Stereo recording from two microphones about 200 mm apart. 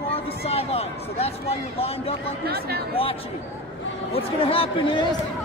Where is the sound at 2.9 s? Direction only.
30° left (ahead or behind).